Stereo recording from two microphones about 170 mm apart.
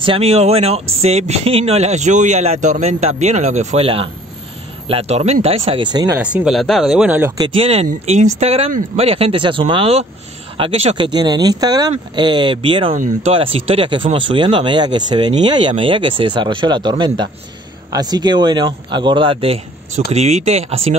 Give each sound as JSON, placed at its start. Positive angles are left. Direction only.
{"t": 0.0, "sound": "speech", "side_deg": -35}
{"t": 6.1, "sound": "speech", "side_deg": -5}
{"t": 7.3, "sound": "speech", "side_deg": -30}
{"t": 11.1, "sound": "speech", "side_deg": -25}
{"t": 12.9, "sound": "speech", "side_deg": -50}
{"t": 13.3, "sound": "speech", "side_deg": -35}